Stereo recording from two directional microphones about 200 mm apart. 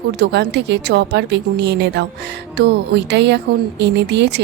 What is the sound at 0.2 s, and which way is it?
Speech, 55° right (ahead or behind).